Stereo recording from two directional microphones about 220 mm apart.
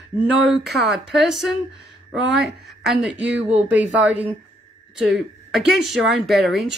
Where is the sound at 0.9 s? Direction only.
Centre (ahead or behind).